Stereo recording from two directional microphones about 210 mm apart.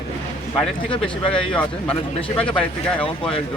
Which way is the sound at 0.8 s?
25° left (ahead or behind).